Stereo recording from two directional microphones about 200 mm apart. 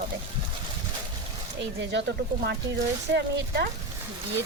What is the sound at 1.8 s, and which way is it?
A woman's voice, 60° right (ahead or behind).